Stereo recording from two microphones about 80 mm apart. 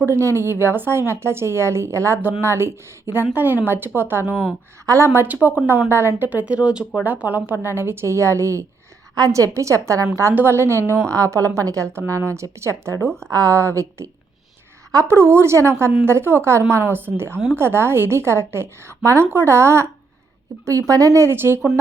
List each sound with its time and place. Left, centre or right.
0.0 s a woman's voice: right; by 7.0 s centre
7.0 s a woman's voice: right
9.1 s a woman's voice: right
10.3 s a woman's voice: right